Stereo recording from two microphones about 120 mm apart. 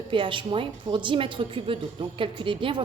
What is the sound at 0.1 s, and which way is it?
A woman's voice, 45° right (ahead or behind).